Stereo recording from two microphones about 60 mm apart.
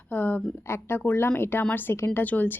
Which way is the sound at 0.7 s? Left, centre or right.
Left.